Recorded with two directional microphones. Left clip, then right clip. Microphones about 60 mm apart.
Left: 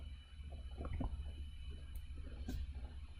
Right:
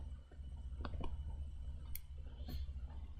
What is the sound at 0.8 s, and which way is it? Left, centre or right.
Squish, left.